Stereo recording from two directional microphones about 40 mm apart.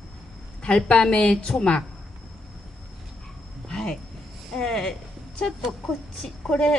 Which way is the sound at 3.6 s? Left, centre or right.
Centre.